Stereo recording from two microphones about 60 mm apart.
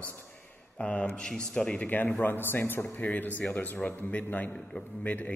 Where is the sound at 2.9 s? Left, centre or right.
Left.